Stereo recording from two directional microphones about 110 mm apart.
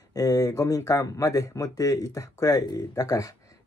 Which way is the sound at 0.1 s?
35° left (ahead or behind).